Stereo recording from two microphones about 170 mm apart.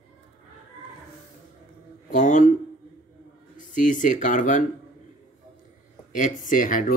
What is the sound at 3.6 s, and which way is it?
Speech, 50° left (ahead or behind).